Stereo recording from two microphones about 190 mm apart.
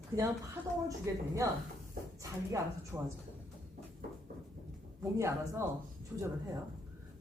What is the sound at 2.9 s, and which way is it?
Speech, 15° right (ahead or behind).